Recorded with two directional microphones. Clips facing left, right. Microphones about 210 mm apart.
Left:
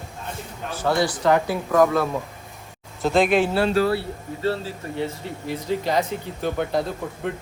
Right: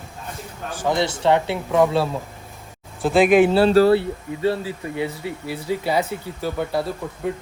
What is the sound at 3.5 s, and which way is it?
Speech, 30° right (ahead or behind).